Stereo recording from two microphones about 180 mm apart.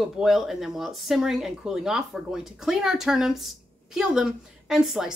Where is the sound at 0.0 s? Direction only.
Centre (ahead or behind).